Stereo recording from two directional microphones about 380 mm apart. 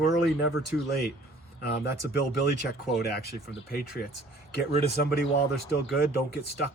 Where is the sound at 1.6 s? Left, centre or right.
Left.